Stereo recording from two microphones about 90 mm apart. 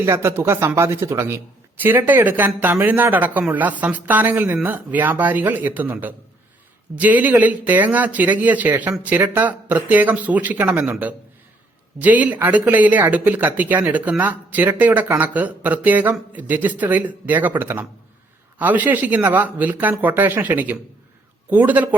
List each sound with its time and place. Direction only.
0.0 s speech: 30° right (ahead or behind)
11.9 s speech: 15° right (ahead or behind)